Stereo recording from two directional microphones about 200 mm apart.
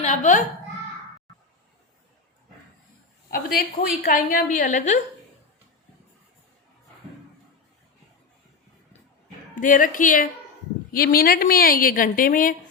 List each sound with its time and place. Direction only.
0.0 s a child's voice: 35° left (ahead or behind)
3.2 s a woman's voice: 50° left (ahead or behind)
9.6 s a woman's voice: 40° left (ahead or behind)